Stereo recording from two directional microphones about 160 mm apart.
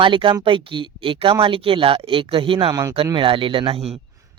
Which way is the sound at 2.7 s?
20° right (ahead or behind).